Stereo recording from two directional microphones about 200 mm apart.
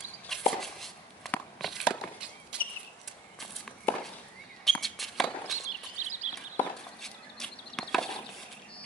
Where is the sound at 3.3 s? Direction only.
Centre (ahead or behind).